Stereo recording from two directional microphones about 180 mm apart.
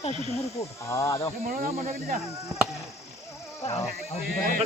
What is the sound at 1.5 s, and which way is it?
Speech, 50° right (ahead or behind).